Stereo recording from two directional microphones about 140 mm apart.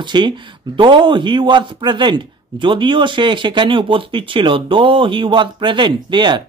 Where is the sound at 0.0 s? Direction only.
35° right (ahead or behind).